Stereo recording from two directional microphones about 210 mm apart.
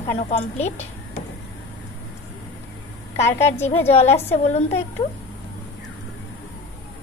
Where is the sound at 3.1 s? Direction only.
30° left (ahead or behind).